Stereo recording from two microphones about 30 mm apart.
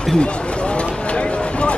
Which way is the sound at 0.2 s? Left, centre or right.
Left.